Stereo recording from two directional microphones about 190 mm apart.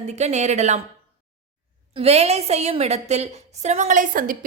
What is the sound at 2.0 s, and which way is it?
A woman's voice, 35° right (ahead or behind).